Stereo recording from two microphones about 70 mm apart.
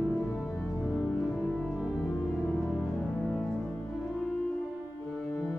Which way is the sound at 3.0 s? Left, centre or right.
Centre.